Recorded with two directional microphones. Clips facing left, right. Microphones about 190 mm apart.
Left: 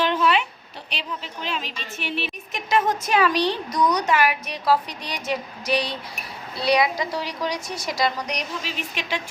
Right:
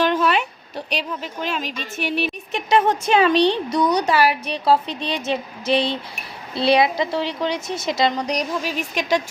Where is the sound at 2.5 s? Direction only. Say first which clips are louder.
Right 4 dB; 30° right (ahead or behind).